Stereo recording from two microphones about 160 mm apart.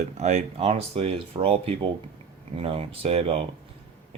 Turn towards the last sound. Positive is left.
turn(degrees=-40)  # may be behind; listen again after turning